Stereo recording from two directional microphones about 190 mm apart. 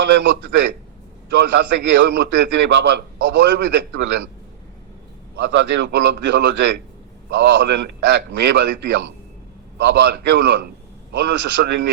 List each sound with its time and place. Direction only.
0.0 s a man's voice: 70° right (ahead or behind)
5.4 s a man's voice: 65° right (ahead or behind)